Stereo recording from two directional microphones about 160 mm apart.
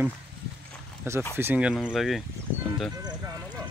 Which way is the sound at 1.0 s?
15° right (ahead or behind).